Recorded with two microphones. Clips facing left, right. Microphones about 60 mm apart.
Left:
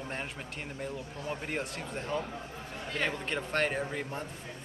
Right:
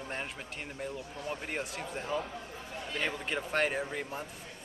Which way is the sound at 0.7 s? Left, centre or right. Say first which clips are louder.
Even; centre.